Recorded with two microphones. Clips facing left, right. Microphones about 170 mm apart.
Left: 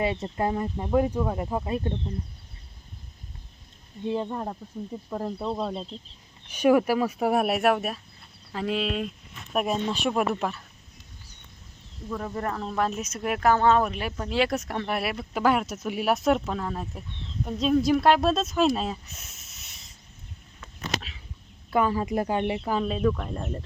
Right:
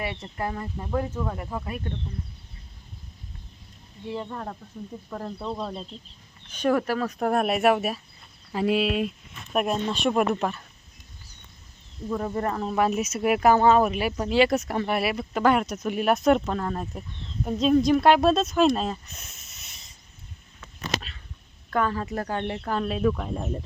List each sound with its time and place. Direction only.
0.0 s speech: 25° left (ahead or behind)
4.0 s speech: 20° left (ahead or behind); by 10.6 s centre (ahead or behind)
12.0 s speech: 10° right (ahead or behind)
21.7 s speech: 10° left (ahead or behind); by 23.6 s 5° right (ahead or behind)